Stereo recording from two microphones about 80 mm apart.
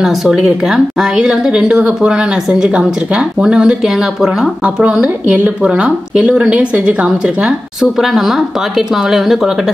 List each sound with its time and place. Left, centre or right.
0.0 s a woman's voice: centre
8.0 s a woman's voice: centre